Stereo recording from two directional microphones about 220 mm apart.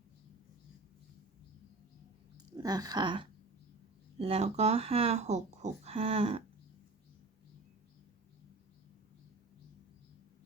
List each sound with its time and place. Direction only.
2.6 s speech: 15° right (ahead or behind)